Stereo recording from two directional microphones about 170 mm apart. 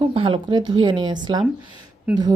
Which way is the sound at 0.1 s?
30° right (ahead or behind).